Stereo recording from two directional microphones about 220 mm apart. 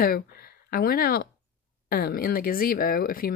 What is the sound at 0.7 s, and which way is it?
Speech, 45° left (ahead or behind).